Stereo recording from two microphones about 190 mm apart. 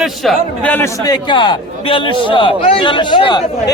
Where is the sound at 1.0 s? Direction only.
25° left (ahead or behind).